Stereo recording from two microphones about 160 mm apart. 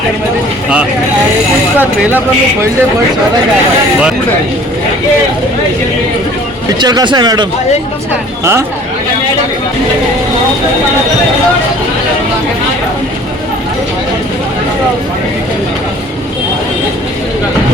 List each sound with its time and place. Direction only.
1.8 s speech: 10° right (ahead or behind)
6.7 s speech: 25° right (ahead or behind)